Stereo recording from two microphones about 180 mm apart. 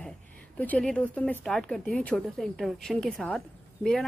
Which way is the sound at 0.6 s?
5° left (ahead or behind).